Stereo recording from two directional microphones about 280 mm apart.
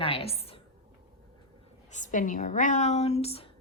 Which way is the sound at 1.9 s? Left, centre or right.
Left.